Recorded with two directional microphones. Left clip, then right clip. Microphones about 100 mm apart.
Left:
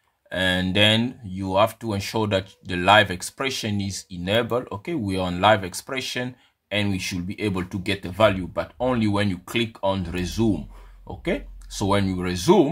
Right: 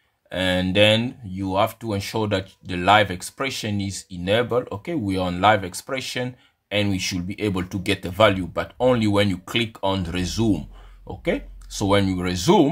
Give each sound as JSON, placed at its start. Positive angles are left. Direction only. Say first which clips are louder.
{"t": 0.3, "sound": "speech", "louder": "even", "side_deg": -5}
{"t": 11.1, "sound": "speech", "louder": "right 2 dB", "side_deg": -15}